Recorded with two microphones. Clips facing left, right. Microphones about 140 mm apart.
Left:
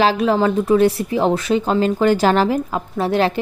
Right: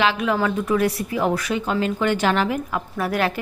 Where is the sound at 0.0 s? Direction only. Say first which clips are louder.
Left 5 dB; 35° left (ahead or behind).